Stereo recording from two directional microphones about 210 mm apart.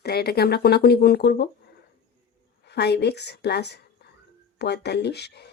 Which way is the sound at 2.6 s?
55° left (ahead or behind).